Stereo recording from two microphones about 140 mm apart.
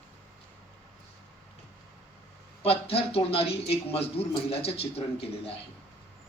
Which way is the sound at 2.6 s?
45° left (ahead or behind).